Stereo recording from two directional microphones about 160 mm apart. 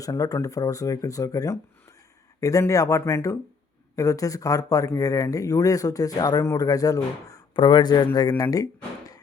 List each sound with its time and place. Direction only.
0.0 s speech: 20° left (ahead or behind)